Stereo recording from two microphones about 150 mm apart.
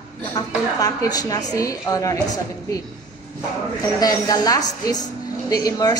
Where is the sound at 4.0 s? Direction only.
25° left (ahead or behind).